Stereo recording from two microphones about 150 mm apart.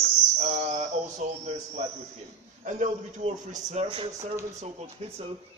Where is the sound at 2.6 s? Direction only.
50° right (ahead or behind).